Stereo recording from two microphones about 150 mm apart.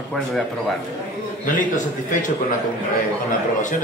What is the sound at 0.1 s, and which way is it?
Speech, centre (ahead or behind).